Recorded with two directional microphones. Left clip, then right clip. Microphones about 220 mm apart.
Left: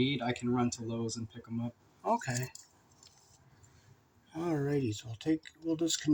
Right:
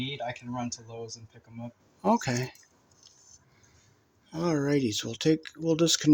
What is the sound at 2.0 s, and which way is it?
Speech, 55° right (ahead or behind).